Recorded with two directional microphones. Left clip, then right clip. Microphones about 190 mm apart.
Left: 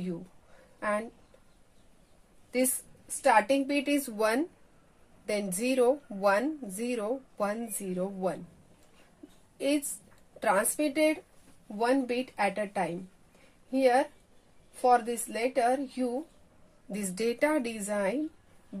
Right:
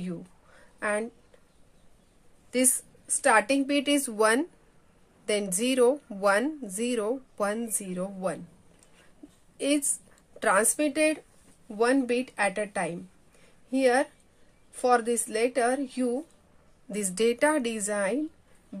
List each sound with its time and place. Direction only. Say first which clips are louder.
0.7 s a woman's voice: right 2 dB; 45° right (ahead or behind)
2.5 s a woman's voice: right 2 dB; 40° right (ahead or behind)
9.6 s a woman's voice: right 2 dB; 40° right (ahead or behind)